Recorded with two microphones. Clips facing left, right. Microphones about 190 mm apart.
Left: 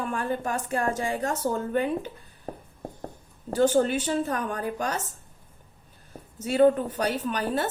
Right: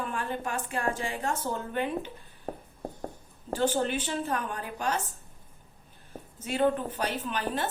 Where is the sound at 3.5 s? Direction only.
45° left (ahead or behind).